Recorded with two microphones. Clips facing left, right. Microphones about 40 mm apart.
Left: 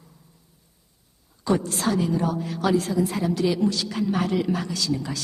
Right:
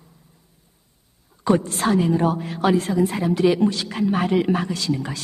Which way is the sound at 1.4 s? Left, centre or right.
Right.